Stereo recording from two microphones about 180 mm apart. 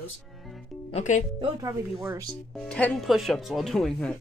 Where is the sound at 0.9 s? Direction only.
45° left (ahead or behind).